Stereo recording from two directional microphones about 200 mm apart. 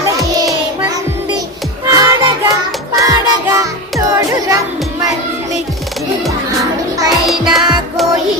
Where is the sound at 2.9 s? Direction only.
15° right (ahead or behind).